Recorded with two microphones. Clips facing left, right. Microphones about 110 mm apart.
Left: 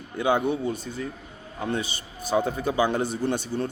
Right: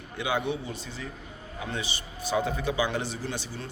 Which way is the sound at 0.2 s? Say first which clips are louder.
Left 6 dB; 45° left (ahead or behind).